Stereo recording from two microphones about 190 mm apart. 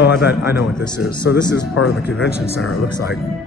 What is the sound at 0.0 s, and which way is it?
Speech, 60° left (ahead or behind).